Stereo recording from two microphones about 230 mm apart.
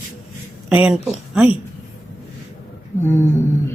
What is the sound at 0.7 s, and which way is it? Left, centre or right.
Speech, centre.